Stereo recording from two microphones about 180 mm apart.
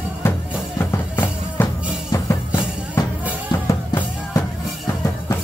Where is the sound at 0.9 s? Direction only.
10° left (ahead or behind).